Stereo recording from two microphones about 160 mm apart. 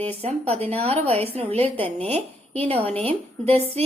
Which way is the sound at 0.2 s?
40° right (ahead or behind).